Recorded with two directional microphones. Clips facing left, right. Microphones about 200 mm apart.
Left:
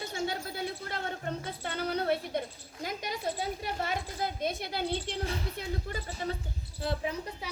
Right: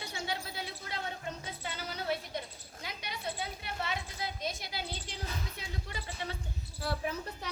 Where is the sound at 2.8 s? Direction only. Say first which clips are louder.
Left 6 dB; 45° left (ahead or behind); by 5.1 s 60° left (ahead or behind).